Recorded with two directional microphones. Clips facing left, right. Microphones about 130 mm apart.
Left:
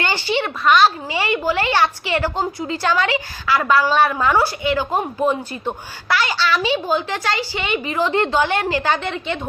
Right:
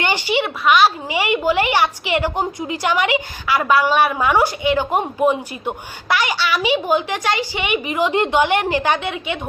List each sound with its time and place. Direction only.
0.0 s speech: 15° right (ahead or behind)